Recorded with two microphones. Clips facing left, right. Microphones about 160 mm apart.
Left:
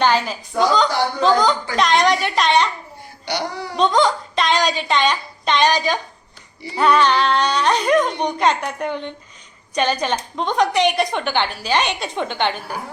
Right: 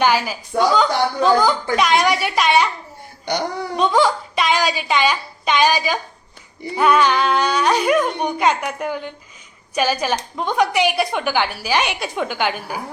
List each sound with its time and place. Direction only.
0.0 s speech: 10° right (ahead or behind)
3.2 s speech: 45° right (ahead or behind)
3.8 s speech: 10° right (ahead or behind)